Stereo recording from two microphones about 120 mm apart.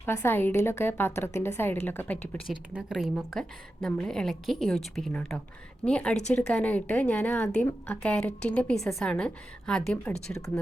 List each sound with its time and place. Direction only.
0.0 s a woman's voice: 20° left (ahead or behind)
2.5 s a woman's voice: 5° right (ahead or behind)